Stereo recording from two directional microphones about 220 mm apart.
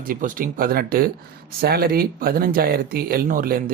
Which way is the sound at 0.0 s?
40° right (ahead or behind).